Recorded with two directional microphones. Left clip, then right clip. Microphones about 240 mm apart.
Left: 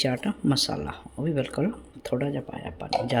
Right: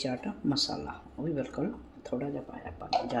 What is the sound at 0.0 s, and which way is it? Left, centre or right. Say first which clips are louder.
Speech: left 7 dB; left.